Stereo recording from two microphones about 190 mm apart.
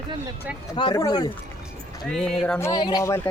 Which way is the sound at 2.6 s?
20° left (ahead or behind).